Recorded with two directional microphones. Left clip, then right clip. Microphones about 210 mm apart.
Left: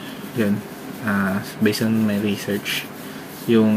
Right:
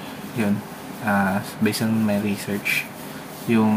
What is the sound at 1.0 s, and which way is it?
A man's voice, centre (ahead or behind).